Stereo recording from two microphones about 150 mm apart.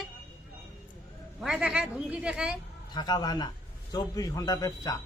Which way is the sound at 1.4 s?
5° right (ahead or behind).